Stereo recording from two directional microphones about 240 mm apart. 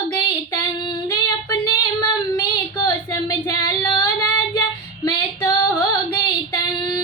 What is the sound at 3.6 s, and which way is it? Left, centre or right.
Female singing, centre.